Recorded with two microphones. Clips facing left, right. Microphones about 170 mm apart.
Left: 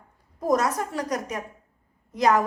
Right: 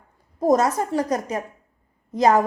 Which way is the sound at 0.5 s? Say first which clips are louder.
Right 4 dB; 30° right (ahead or behind).